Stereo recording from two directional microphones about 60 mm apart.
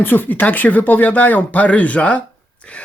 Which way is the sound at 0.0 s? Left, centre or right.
Left.